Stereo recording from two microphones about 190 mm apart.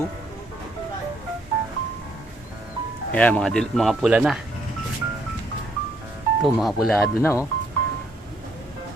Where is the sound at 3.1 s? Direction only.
5° left (ahead or behind).